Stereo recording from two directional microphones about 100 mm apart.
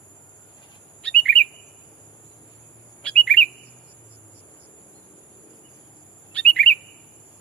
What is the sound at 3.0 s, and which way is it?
Chirp, 10° left (ahead or behind).